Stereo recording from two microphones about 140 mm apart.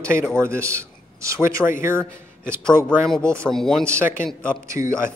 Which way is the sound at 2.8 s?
15° right (ahead or behind).